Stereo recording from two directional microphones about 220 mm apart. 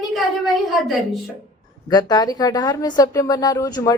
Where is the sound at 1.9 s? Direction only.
15° left (ahead or behind).